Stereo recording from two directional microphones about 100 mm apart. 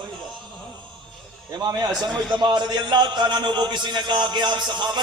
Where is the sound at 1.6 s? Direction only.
40° right (ahead or behind).